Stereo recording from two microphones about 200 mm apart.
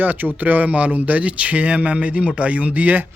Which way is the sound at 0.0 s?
10° right (ahead or behind).